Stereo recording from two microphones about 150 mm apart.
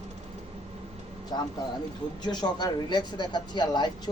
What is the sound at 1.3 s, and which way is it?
Speech, 30° left (ahead or behind).